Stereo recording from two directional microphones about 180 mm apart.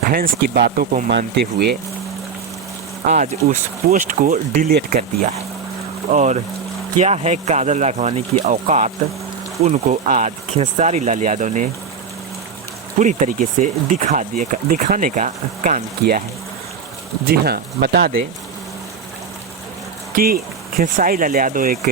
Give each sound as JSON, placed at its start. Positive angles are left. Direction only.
{"t": 0.1, "sound": "speech", "side_deg": -55}
{"t": 3.1, "sound": "speech", "side_deg": -40}
{"t": 13.0, "sound": "speech", "side_deg": -40}
{"t": 17.4, "sound": "speech", "side_deg": -60}
{"t": 20.1, "sound": "speech", "side_deg": -55}